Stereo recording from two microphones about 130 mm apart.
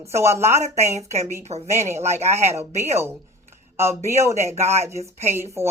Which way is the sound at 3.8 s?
20° right (ahead or behind).